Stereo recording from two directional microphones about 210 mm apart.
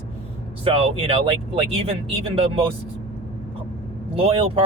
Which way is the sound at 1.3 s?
25° right (ahead or behind).